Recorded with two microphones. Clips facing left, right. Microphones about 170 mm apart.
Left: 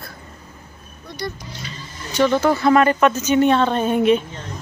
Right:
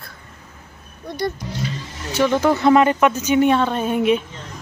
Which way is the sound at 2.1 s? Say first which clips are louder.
Even; 15° right (ahead or behind).